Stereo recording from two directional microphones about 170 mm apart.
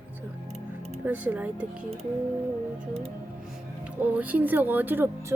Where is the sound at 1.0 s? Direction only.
10° right (ahead or behind).